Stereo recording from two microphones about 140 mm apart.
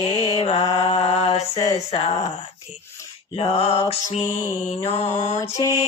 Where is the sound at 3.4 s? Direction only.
45° left (ahead or behind).